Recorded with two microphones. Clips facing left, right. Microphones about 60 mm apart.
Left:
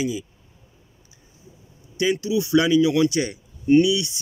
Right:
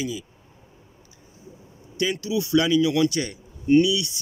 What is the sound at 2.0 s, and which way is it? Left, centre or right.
Speech, left.